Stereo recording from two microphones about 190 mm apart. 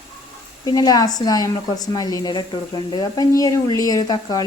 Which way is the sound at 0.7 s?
20° left (ahead or behind).